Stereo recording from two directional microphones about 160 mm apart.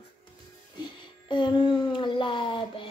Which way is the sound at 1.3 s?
30° left (ahead or behind).